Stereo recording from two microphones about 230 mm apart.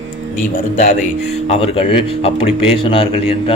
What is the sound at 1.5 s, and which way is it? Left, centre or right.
Speech, left.